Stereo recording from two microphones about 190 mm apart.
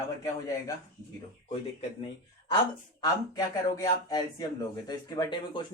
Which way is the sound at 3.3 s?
20° left (ahead or behind).